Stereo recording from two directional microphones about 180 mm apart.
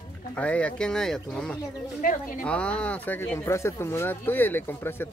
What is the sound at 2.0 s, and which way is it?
Speech, 50° left (ahead or behind).